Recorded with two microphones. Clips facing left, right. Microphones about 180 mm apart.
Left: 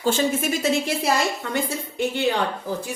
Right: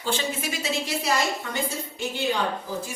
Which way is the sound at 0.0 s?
45° left (ahead or behind).